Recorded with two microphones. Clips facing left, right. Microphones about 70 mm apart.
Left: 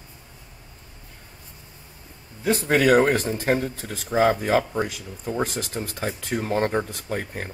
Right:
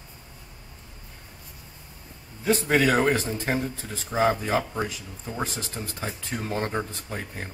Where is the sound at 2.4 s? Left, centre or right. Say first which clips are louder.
Left 2 dB; left.